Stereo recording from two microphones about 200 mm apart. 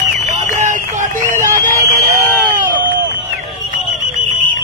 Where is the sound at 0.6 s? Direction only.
40° right (ahead or behind).